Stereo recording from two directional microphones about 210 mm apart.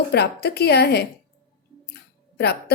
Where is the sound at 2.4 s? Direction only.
50° left (ahead or behind).